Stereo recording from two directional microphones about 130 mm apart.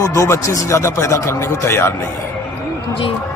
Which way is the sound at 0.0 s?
25° left (ahead or behind).